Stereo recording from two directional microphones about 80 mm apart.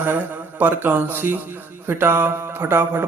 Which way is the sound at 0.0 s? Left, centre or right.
Right.